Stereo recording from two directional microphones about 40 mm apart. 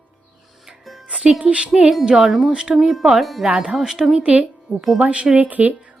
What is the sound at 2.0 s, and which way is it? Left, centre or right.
Speech, centre.